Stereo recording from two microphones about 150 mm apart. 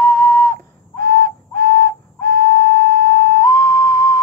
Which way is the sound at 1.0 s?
65° right (ahead or behind).